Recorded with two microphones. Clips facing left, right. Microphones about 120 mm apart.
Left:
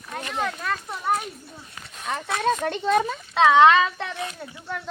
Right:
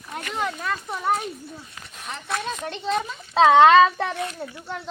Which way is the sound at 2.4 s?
55° left (ahead or behind).